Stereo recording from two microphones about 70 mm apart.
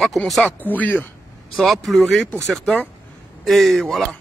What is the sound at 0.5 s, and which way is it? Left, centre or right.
Speech, left.